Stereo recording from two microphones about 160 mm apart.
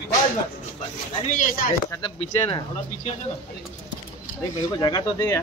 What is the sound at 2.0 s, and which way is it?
Speech, 35° left (ahead or behind).